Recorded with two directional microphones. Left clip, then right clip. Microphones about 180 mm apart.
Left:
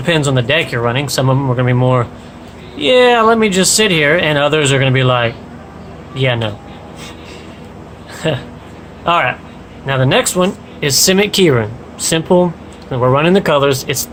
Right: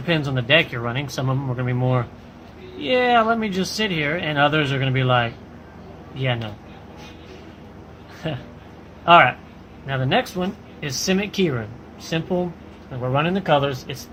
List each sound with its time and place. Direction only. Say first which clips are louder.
0.0 s speech: left 9 dB; 35° left (ahead or behind)
8.2 s speech: left 12 dB; 30° left (ahead or behind); by 13.9 s 55° left (ahead or behind)